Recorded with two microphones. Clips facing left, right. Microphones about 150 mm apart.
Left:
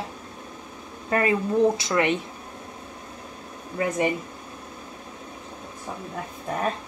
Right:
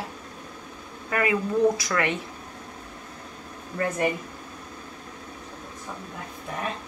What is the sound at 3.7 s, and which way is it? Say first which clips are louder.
Speech: left 1 dB; 15° left (ahead or behind).